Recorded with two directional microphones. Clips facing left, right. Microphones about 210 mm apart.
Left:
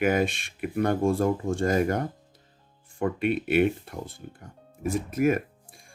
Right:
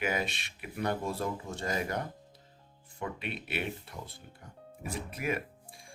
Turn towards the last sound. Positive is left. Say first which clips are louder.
# left 11 dB
turn(degrees=45)  # may be behind; listen again after turning